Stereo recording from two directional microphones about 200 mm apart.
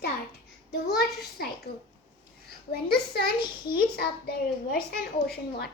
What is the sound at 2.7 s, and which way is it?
Speech, 50° left (ahead or behind).